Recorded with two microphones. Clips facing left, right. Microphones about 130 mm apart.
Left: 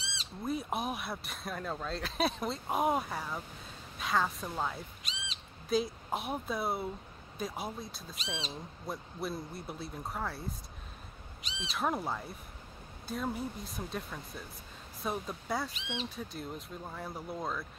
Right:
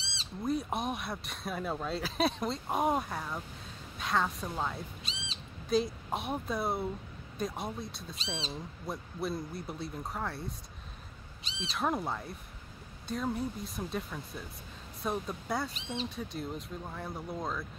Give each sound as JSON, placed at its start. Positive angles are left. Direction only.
{"t": 0.4, "sound": "speech", "side_deg": 0}
{"t": 5.0, "sound": "bird", "side_deg": -30}
{"t": 5.7, "sound": "speech", "side_deg": 0}
{"t": 11.6, "sound": "speech", "side_deg": 0}